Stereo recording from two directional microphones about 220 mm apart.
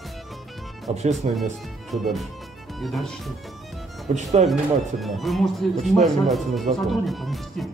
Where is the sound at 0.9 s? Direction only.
30° right (ahead or behind).